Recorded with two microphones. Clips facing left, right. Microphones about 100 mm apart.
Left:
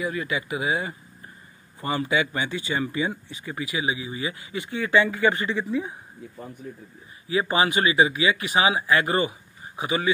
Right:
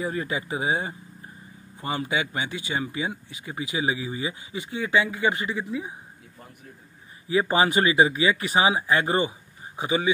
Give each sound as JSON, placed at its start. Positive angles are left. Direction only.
{"t": 0.0, "sound": "speech", "side_deg": -35}
{"t": 1.8, "sound": "speech", "side_deg": -15}
{"t": 3.5, "sound": "speech", "side_deg": -25}
{"t": 3.8, "sound": "speech", "side_deg": -40}
{"t": 4.5, "sound": "speech", "side_deg": -15}
{"t": 7.2, "sound": "speech", "side_deg": -35}